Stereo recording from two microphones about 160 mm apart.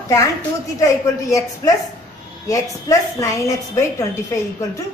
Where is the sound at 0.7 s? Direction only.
20° left (ahead or behind).